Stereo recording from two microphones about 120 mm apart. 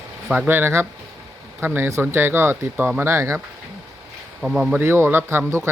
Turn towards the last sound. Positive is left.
turn(degrees=-20)  # may be behind; listen again after turning